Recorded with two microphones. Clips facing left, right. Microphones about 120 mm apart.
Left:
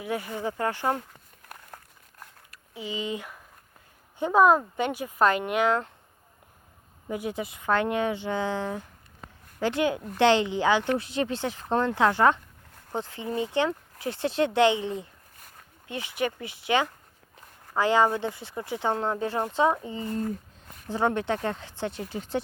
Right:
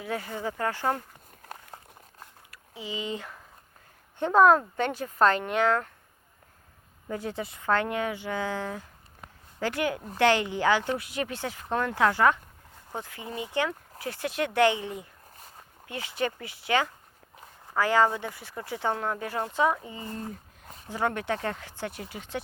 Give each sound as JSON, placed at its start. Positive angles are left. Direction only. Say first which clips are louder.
{"t": 0.0, "sound": "speech", "louder": "left 2 dB", "side_deg": 15}
{"t": 1.7, "sound": "crumpling", "louder": "even", "side_deg": -20}
{"t": 2.9, "sound": "speech", "louder": "left 1 dB", "side_deg": 20}
{"t": 7.1, "sound": "speech", "louder": "left 2 dB", "side_deg": 15}
{"t": 20.0, "sound": "speech", "louder": "left 7 dB", "side_deg": -20}
{"t": 20.9, "sound": "speech", "louder": "left 3 dB", "side_deg": 25}
{"t": 22.1, "sound": "speech", "louder": "left 6 dB", "side_deg": 35}